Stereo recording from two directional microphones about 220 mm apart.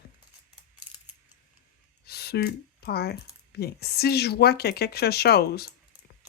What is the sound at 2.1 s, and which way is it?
Speech, 45° left (ahead or behind).